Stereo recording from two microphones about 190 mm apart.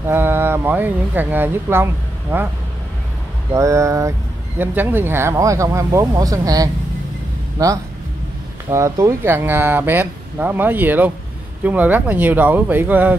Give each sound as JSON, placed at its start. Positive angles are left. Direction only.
{"t": 0.0, "sound": "speech", "side_deg": -10}
{"t": 3.5, "sound": "speech", "side_deg": -15}